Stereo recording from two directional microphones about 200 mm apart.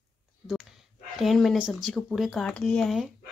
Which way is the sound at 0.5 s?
Centre (ahead or behind).